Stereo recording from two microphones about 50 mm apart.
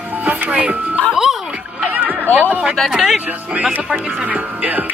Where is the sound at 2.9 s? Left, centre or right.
Centre.